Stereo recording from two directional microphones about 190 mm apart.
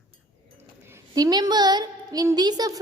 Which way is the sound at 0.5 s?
15° right (ahead or behind).